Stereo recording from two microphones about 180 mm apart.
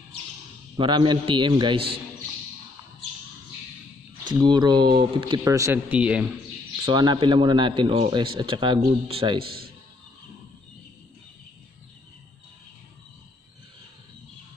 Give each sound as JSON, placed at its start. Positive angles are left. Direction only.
{"t": 0.7, "sound": "speech", "side_deg": -25}
{"t": 4.3, "sound": "speech", "side_deg": -25}
{"t": 6.9, "sound": "speech", "side_deg": -25}
{"t": 9.4, "sound": "speech", "side_deg": -55}